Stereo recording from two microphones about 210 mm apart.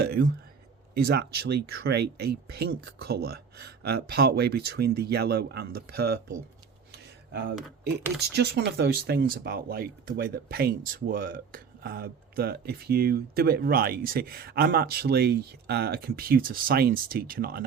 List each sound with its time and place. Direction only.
0.0 s speech: 45° right (ahead or behind)